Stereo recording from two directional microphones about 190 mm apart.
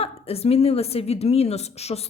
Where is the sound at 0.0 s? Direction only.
30° left (ahead or behind).